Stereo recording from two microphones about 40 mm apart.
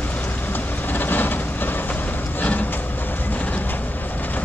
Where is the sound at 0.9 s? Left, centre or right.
Left.